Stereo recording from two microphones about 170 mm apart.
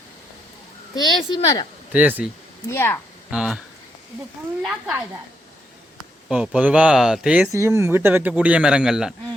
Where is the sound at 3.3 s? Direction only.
5° right (ahead or behind).